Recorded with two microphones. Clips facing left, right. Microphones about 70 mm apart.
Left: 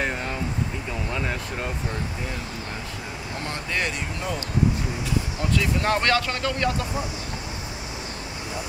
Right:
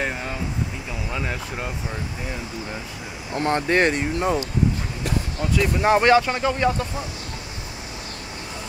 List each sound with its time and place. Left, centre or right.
1.1 s speech: centre
3.3 s speech: right
5.5 s speech: centre